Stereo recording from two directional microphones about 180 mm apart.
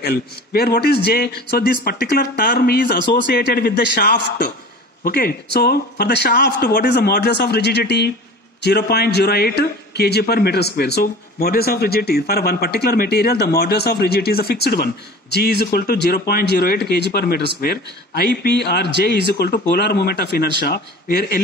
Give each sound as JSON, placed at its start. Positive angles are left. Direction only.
{"t": 0.0, "sound": "a man's voice", "side_deg": 65}
{"t": 5.0, "sound": "a man's voice", "side_deg": 55}